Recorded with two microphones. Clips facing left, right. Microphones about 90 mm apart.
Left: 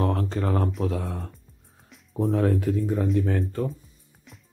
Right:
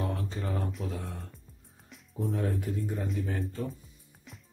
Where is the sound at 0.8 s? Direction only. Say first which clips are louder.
Left 9 dB; 90° left.